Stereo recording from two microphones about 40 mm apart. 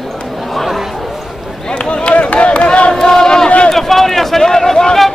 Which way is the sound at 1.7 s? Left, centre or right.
Left.